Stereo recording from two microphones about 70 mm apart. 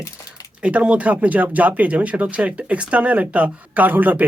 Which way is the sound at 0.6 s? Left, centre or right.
Centre.